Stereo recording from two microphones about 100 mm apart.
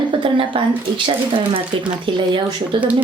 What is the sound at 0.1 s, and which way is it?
Speech, 60° right (ahead or behind).